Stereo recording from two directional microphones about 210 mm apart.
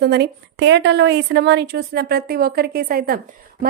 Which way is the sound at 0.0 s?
50° right (ahead or behind).